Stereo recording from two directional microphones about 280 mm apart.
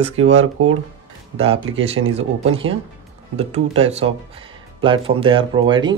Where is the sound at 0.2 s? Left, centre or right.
Right.